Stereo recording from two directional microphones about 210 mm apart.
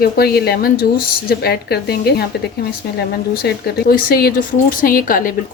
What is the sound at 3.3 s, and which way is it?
Speech, 50° left (ahead or behind).